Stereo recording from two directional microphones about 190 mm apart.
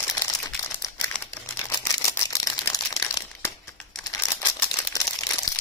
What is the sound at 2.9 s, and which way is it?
Crumpling, 15° left (ahead or behind).